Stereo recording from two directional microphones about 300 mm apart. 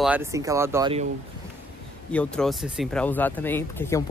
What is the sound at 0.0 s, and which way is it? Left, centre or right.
Speech, centre.